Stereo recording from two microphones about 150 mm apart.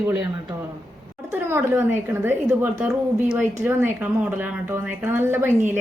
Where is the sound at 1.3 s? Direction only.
15° right (ahead or behind).